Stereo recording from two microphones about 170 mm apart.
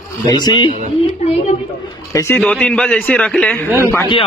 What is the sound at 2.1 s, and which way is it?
A man's voice, 15° left (ahead or behind).